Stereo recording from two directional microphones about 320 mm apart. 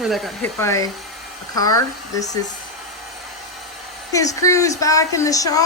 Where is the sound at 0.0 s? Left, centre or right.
Centre.